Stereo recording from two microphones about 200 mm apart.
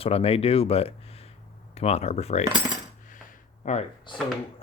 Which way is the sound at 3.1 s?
40° left (ahead or behind).